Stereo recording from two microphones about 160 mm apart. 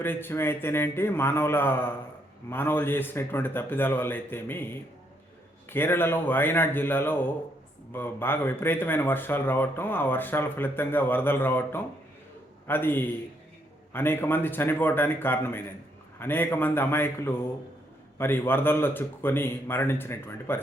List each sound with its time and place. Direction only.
0.0 s speech: 15° left (ahead or behind)